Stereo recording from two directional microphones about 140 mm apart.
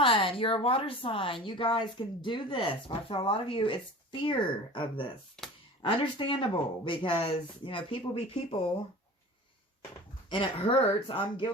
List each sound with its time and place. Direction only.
0.0 s speech: 40° left (ahead or behind)
10.2 s speech: 35° left (ahead or behind)